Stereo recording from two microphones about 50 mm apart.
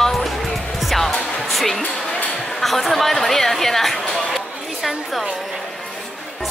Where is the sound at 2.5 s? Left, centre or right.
Centre.